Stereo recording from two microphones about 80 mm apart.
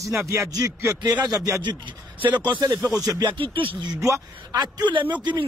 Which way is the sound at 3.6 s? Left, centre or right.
Right.